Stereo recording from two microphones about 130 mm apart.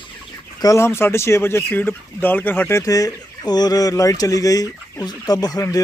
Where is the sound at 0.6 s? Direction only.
20° left (ahead or behind).